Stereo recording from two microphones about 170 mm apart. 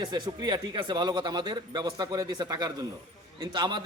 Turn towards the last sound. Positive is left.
turn(degrees=-25)  # may be behind; listen again after turning